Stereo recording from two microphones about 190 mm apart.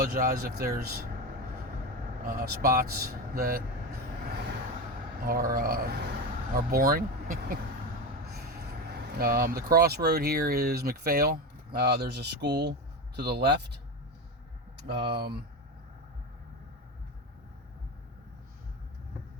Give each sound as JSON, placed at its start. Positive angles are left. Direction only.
{"t": 0.0, "sound": "speech", "side_deg": -50}
{"t": 2.2, "sound": "speech", "side_deg": -55}
{"t": 5.2, "sound": "speech", "side_deg": -50}
{"t": 14.8, "sound": "speech", "side_deg": -60}